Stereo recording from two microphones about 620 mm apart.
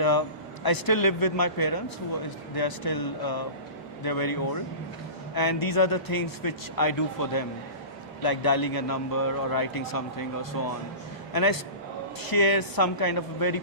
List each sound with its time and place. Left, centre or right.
0.0 s a man's voice: left
12.2 s a man's voice: left